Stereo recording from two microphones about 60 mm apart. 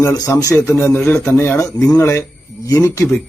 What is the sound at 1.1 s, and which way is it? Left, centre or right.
Speech, left.